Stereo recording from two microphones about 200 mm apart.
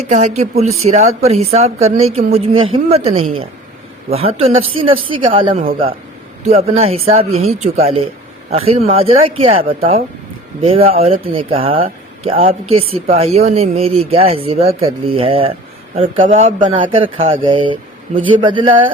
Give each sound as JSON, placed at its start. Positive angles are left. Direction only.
{"t": 0.0, "sound": "speech", "side_deg": -35}
{"t": 6.7, "sound": "speech", "side_deg": -30}
{"t": 16.2, "sound": "speech", "side_deg": -40}